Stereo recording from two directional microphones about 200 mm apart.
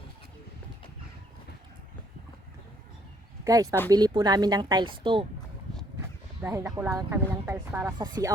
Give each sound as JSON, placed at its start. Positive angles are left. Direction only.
{"t": 3.4, "sound": "a woman's voice", "side_deg": -15}
{"t": 6.4, "sound": "a woman's voice", "side_deg": -15}